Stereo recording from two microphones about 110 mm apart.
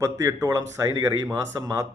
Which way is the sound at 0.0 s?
30° right (ahead or behind).